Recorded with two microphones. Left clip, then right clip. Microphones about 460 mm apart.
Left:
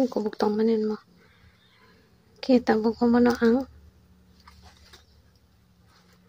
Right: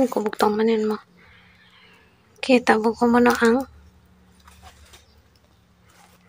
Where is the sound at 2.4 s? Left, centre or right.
Left.